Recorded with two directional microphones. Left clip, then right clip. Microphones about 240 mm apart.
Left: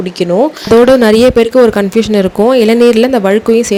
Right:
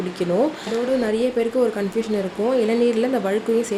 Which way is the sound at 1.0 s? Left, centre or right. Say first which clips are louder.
Left 14 dB; left.